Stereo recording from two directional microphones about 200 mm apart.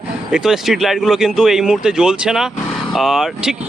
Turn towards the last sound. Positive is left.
turn(degrees=0)  # may be behind; listen again after turning